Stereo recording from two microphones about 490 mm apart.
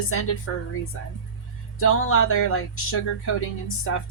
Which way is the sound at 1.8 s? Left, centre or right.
Left.